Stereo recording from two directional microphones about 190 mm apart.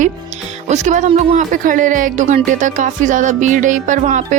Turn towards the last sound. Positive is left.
turn(degrees=-40)  # may be behind; listen again after turning